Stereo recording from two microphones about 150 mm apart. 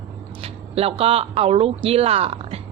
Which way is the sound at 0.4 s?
40° right (ahead or behind).